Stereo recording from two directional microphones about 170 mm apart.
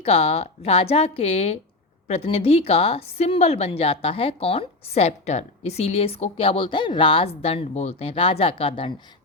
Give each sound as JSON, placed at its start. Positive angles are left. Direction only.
{"t": 0.0, "sound": "a woman's voice", "side_deg": 35}